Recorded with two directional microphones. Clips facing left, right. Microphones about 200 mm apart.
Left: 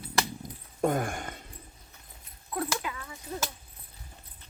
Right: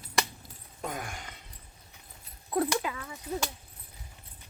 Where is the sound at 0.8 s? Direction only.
50° left (ahead or behind).